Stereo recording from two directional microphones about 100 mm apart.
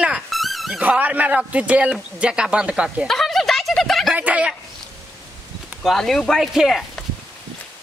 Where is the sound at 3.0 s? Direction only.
5° left (ahead or behind).